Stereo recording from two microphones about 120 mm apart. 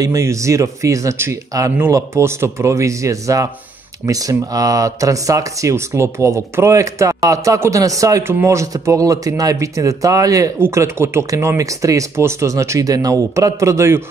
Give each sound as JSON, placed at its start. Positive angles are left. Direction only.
{"t": 0.0, "sound": "speech", "side_deg": -25}